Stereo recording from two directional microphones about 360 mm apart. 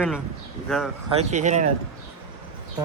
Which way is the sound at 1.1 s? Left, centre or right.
Centre.